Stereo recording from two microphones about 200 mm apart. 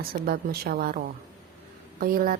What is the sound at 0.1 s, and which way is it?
Speech, 50° right (ahead or behind).